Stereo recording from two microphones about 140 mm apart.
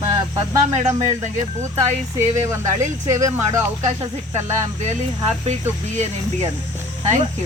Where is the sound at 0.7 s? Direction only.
50° right (ahead or behind).